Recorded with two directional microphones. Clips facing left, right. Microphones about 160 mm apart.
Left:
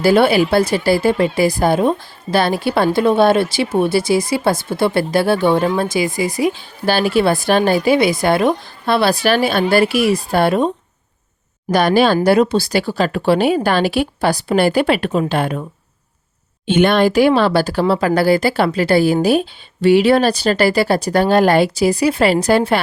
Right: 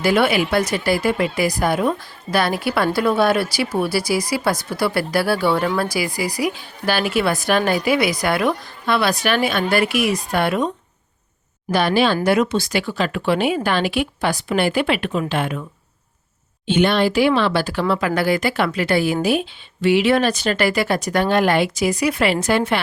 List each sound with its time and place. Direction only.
0.0 s speech: 30° left (ahead or behind)
11.7 s speech: 45° left (ahead or behind)
16.6 s speech: 50° left (ahead or behind); by 22.8 s 35° left (ahead or behind)